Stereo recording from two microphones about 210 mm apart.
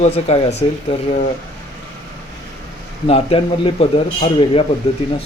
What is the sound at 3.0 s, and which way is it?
A man's voice, 30° left (ahead or behind).